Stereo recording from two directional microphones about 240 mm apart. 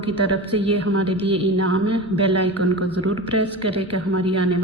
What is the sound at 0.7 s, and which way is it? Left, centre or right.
A woman's voice, right.